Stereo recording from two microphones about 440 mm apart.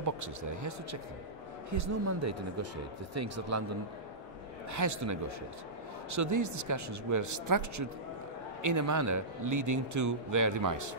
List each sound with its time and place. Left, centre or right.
0.0 s speech: right
4.6 s speech: right